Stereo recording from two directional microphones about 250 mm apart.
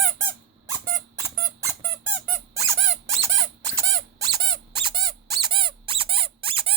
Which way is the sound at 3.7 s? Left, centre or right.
Centre.